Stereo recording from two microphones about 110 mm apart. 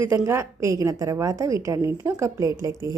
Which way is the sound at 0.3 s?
25° right (ahead or behind).